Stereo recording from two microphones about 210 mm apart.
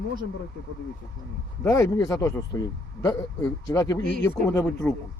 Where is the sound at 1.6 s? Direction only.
15° left (ahead or behind).